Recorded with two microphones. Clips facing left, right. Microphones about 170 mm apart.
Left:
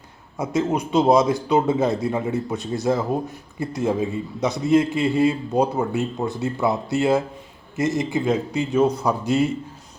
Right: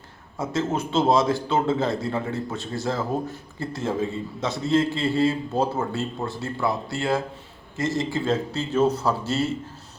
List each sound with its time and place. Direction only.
0.3 s a man's voice: 15° left (ahead or behind)